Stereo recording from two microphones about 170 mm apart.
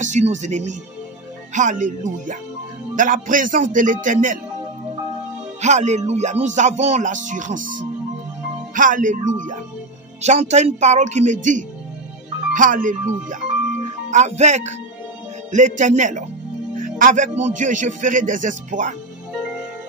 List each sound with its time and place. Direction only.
0.0 s speech: 45° right (ahead or behind)
5.6 s speech: 40° right (ahead or behind)